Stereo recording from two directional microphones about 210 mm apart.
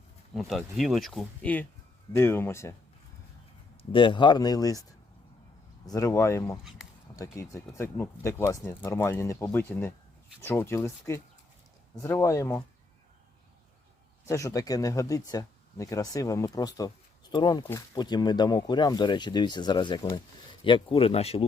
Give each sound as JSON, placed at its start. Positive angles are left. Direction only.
{"t": 0.3, "sound": "speech", "side_deg": 0}
{"t": 3.9, "sound": "speech", "side_deg": 25}
{"t": 14.3, "sound": "speech", "side_deg": 15}